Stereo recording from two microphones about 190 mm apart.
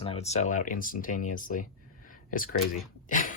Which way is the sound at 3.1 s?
45° left (ahead or behind).